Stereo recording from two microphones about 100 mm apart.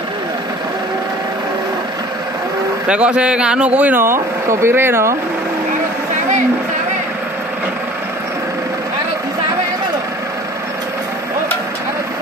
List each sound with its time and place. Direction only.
2.9 s speech: 10° right (ahead or behind)